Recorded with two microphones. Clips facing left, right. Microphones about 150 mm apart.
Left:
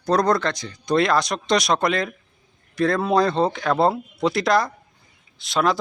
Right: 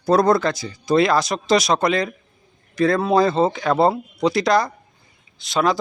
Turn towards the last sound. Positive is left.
turn(degrees=0)  # may be behind; listen again after turning